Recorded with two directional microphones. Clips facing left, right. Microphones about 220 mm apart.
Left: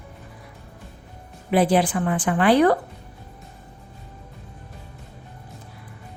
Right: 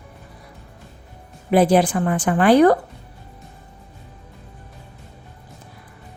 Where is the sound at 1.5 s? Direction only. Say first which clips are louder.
Right 3 dB; 45° right (ahead or behind).